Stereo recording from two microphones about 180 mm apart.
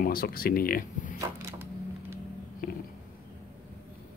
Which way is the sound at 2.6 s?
55° left (ahead or behind).